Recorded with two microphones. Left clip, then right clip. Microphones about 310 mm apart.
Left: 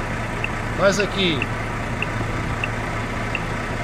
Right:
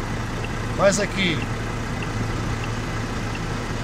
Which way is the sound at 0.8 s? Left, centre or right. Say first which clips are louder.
Left 1 dB; right.